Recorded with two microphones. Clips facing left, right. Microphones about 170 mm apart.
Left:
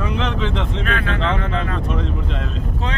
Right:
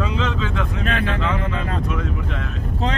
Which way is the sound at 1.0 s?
30° left (ahead or behind).